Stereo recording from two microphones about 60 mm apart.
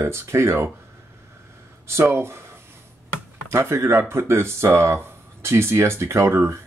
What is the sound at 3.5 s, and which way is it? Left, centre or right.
Speech, right.